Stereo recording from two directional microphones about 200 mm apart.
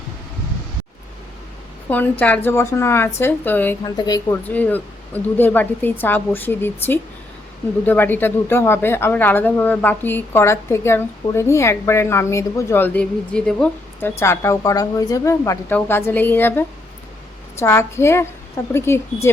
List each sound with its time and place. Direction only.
1.9 s a woman's voice: 10° left (ahead or behind)
4.4 s a woman's voice: 10° left (ahead or behind)